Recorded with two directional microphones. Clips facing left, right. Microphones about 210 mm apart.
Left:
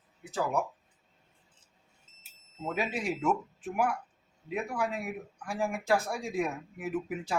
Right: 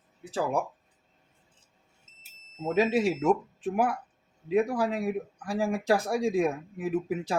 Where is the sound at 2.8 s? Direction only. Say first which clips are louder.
Right 9 dB; 90° right.